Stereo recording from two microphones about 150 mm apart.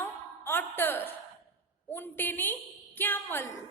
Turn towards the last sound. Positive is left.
turn(degrees=15)  # may be behind; listen again after turning